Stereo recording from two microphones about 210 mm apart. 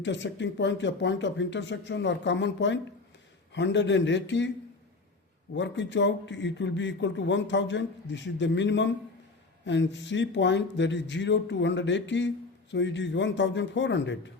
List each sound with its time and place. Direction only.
0.0 s a man's voice: 60° left (ahead or behind)
5.5 s a man's voice: 60° left (ahead or behind)